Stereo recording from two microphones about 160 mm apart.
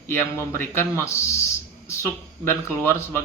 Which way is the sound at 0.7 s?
15° left (ahead or behind).